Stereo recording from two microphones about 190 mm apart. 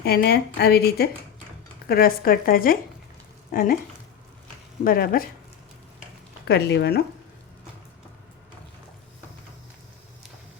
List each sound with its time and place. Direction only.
0.0 s a woman's voice: 55° left (ahead or behind)
4.8 s speech: 50° left (ahead or behind)
6.5 s a woman's voice: 65° left (ahead or behind)